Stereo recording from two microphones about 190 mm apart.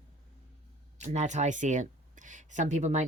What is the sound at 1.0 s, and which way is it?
Speech, 35° right (ahead or behind).